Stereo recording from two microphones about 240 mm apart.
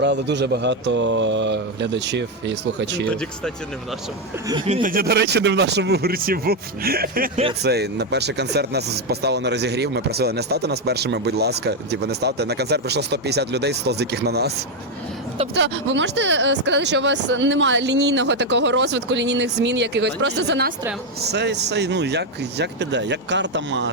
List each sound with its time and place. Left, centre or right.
0.0 s speech: right
3.1 s speech: centre
4.4 s speech: right
15.5 s speech: right